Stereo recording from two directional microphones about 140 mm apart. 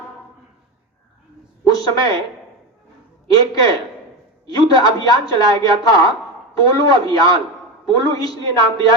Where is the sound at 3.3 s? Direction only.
25° left (ahead or behind).